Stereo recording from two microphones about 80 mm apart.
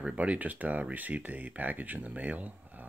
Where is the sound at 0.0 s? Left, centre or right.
Centre.